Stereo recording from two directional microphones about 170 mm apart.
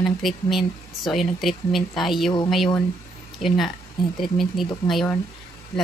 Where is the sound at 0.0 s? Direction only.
Centre (ahead or behind).